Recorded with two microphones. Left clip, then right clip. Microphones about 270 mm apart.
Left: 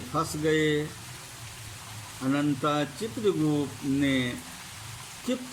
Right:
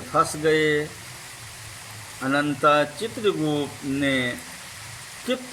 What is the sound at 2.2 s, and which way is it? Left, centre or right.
Speech, right.